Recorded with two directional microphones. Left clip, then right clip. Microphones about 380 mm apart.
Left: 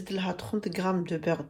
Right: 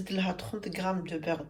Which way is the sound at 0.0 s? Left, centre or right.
Centre.